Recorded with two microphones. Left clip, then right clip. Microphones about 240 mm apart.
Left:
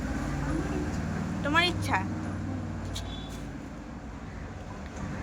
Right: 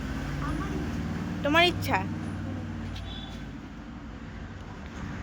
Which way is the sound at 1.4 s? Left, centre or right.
Centre.